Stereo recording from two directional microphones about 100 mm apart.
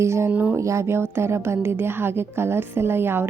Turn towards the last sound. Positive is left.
turn(degrees=-25)  # may be behind; listen again after turning